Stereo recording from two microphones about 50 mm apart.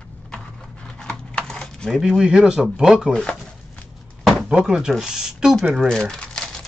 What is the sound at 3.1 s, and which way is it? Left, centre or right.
Speech, centre.